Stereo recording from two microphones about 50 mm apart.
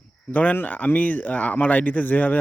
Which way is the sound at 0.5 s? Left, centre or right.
Left.